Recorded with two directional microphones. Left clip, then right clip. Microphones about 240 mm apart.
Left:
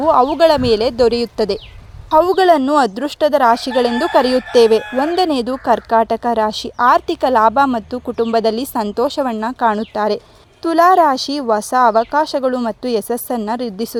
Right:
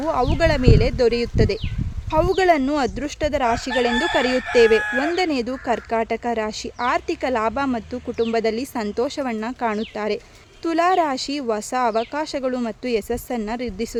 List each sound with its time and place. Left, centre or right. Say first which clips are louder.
0.0 s speech: left 9 dB; left
2.8 s speech: left 6 dB; centre
3.3 s speech: left 7 dB; centre
4.2 s speech: left 6 dB; centre
4.5 s speech: left 3 dB; centre